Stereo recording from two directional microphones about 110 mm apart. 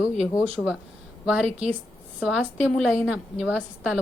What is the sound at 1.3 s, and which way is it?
A woman's voice, 10° right (ahead or behind).